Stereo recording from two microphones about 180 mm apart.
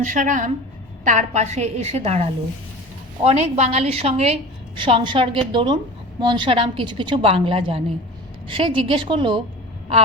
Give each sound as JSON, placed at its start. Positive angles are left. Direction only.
{"t": 0.0, "sound": "a woman's voice", "side_deg": -45}
{"t": 3.2, "sound": "a woman's voice", "side_deg": -35}